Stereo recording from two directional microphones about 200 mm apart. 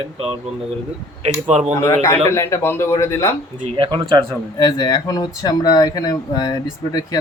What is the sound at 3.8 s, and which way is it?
Speech, 20° right (ahead or behind).